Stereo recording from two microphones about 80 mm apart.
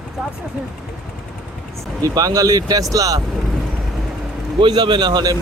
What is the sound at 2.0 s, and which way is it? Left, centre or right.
Speech, right.